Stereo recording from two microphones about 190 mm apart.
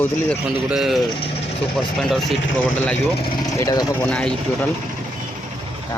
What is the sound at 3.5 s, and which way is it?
Speech, 20° left (ahead or behind).